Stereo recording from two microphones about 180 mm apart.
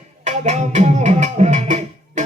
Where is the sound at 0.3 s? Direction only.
40° right (ahead or behind).